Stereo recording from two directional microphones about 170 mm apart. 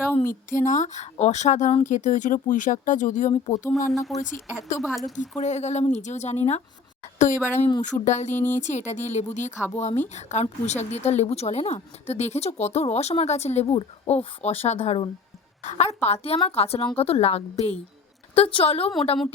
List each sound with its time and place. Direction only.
0.0 s a sound: 15° left (ahead or behind)
0.5 s speech: 45° left (ahead or behind)
3.9 s speech: centre (ahead or behind)
5.4 s a woman's voice: 40° left (ahead or behind)
7.3 s speech: 15° left (ahead or behind)
7.8 s speech: 45° left (ahead or behind)
8.3 s speech: 10° left (ahead or behind)
8.6 s a woman's voice: 45° left (ahead or behind)